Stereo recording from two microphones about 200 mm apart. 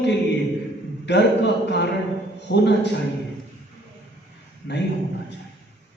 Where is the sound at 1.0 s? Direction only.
60° left (ahead or behind).